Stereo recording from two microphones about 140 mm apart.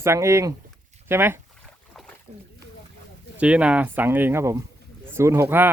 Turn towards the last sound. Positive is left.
turn(degrees=-15)  # may be behind; listen again after turning